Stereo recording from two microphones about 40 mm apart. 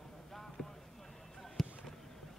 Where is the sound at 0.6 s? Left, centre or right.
Left.